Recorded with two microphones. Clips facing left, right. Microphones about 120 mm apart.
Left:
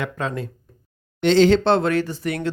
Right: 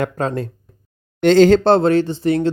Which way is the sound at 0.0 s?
40° right (ahead or behind).